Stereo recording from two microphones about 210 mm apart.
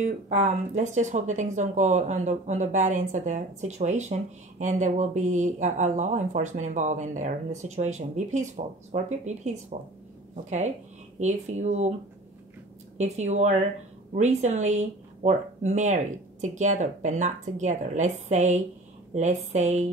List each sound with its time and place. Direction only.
0.0 s speech: 35° right (ahead or behind)
12.9 s speech: 35° right (ahead or behind)